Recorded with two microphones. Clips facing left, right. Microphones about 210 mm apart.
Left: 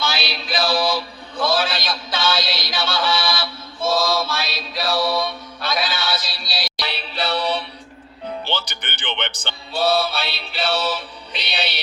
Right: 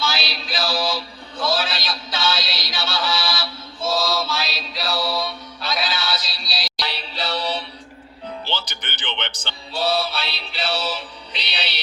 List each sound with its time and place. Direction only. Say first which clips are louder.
0.0 s mantra: left 1 dB; 55° left (ahead or behind)
8.4 s music: left 2 dB; 55° left (ahead or behind)